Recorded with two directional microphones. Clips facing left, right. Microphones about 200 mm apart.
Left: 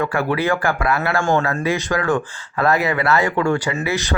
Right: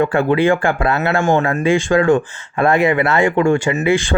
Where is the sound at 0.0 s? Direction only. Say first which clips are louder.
Right 6 dB; 25° right (ahead or behind).